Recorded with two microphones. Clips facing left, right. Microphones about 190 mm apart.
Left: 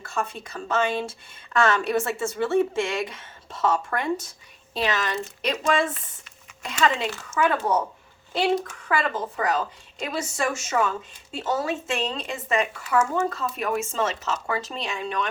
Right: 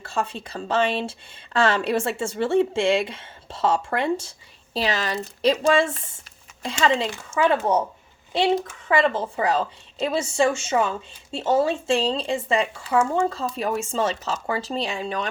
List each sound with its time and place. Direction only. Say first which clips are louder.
0.0 s speech: right 2 dB; 30° right (ahead or behind)
8.9 s speech: right 5 dB; 25° right (ahead or behind)